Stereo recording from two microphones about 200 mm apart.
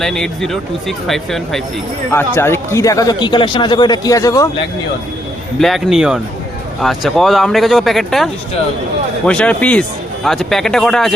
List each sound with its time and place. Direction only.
0.0 s a man's voice: centre (ahead or behind)
5.5 s speech: centre (ahead or behind)